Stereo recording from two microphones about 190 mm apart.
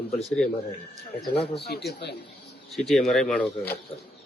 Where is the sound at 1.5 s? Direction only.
60° left (ahead or behind).